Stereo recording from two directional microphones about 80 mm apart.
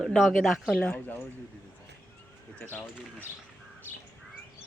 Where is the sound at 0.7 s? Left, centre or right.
Centre.